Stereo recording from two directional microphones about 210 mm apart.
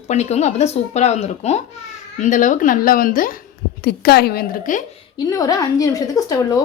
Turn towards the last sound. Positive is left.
turn(degrees=15)  # may be behind; listen again after turning